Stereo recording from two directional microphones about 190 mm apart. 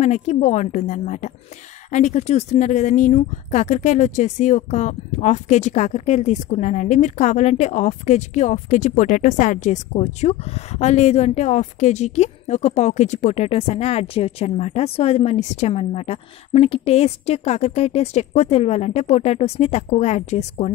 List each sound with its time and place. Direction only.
0.0 s speech: 35° left (ahead or behind)